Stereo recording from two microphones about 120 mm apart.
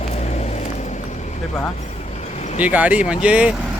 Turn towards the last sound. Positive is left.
turn(degrees=-10)  # may be behind; listen again after turning